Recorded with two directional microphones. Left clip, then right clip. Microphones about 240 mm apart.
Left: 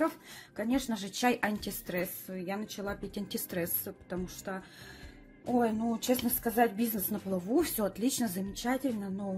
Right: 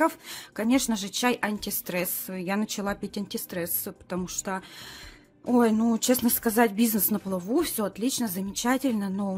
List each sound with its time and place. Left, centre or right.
0.6 s a woman's voice: right
3.3 s a woman's voice: centre
5.9 s a woman's voice: right
7.4 s speech: centre
8.6 s a woman's voice: right